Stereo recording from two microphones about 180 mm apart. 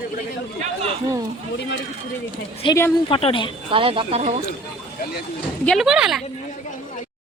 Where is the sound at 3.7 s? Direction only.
30° right (ahead or behind).